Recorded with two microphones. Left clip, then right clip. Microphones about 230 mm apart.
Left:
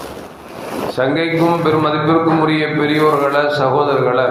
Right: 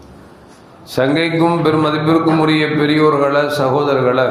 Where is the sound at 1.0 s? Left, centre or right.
Right.